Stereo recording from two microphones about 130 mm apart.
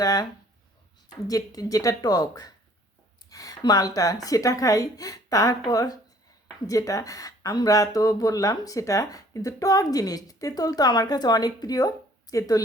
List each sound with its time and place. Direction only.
0.0 s speech: 30° left (ahead or behind)
1.3 s speech: 30° left (ahead or behind)